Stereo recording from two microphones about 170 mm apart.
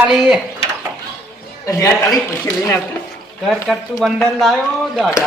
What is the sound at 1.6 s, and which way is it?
Speech, 15° left (ahead or behind).